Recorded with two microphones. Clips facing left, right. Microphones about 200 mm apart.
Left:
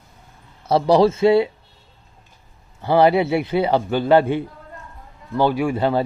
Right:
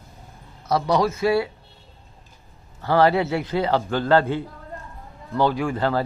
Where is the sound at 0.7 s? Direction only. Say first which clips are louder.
Left 6 dB; 30° left (ahead or behind).